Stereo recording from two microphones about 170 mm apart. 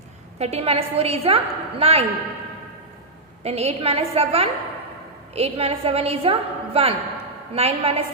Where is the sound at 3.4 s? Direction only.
35° right (ahead or behind).